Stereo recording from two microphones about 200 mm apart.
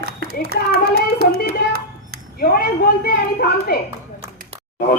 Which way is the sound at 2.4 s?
50° left (ahead or behind).